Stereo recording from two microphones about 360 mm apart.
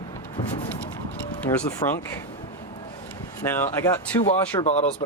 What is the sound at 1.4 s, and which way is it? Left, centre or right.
Speech, centre.